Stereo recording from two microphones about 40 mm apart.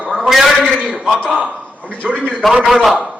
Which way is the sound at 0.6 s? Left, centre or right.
Right.